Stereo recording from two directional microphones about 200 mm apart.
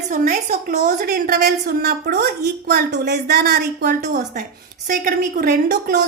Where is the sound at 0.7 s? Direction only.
50° right (ahead or behind).